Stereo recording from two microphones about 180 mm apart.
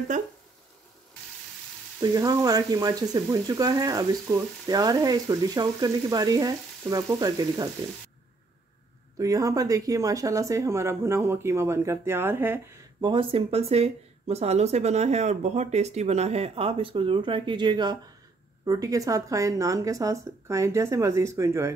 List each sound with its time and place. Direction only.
0.1 s speech: 45° right (ahead or behind)
2.0 s speech: 20° right (ahead or behind)
9.2 s speech: 20° right (ahead or behind)
13.0 s speech: 30° right (ahead or behind)